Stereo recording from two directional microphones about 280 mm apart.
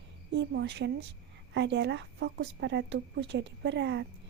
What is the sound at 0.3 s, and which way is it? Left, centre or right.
A woman's voice, right.